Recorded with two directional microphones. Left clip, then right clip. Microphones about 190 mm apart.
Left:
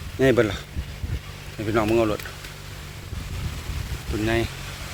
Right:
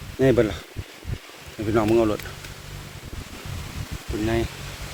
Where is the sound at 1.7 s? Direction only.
15° right (ahead or behind).